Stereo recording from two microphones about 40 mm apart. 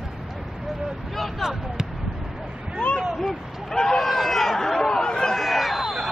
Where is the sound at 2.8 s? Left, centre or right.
Left.